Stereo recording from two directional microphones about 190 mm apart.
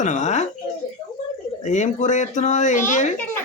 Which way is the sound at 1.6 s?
40° left (ahead or behind).